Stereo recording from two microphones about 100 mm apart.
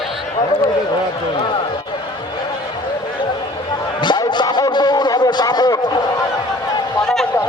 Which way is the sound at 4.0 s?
50° left (ahead or behind).